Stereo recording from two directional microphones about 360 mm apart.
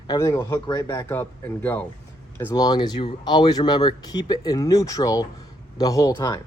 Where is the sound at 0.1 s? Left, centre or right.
Centre.